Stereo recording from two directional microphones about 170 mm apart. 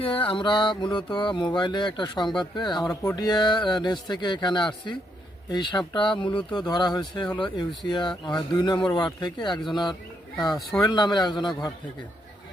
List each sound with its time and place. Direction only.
0.0 s mantra: 30° left (ahead or behind)